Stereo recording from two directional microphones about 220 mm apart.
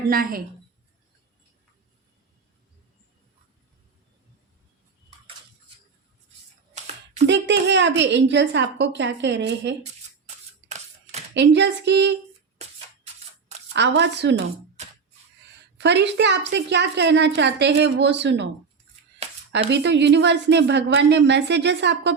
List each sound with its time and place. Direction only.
0.1 s a woman's voice: 40° right (ahead or behind)
7.3 s a woman's voice: 50° right (ahead or behind)
9.8 s a sound: 30° right (ahead or behind)
11.3 s a woman's voice: 50° right (ahead or behind)
13.7 s a woman's voice: 50° right (ahead or behind)
15.8 s a woman's voice: 50° right (ahead or behind)
19.2 s a sound: 30° right (ahead or behind)
19.7 s a woman's voice: 50° right (ahead or behind)